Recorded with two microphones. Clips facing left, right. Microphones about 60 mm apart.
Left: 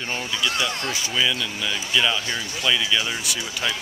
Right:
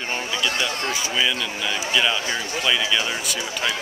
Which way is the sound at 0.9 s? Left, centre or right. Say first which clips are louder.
Right 1 dB; centre.